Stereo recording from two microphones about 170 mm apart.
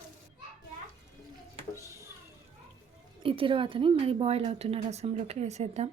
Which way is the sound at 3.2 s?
30° right (ahead or behind).